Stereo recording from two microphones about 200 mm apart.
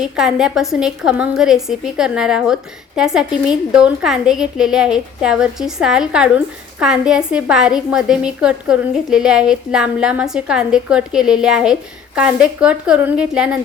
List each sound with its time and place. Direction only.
0.0 s a woman's voice: 5° right (ahead or behind)